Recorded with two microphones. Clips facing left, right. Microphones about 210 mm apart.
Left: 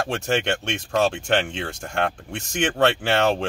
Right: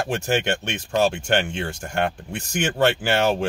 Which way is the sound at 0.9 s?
Centre (ahead or behind).